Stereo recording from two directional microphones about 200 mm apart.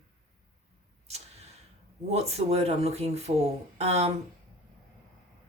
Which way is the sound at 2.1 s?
30° right (ahead or behind).